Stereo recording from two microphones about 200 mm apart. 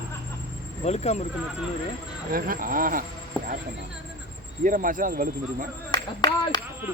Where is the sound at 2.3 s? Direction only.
45° right (ahead or behind).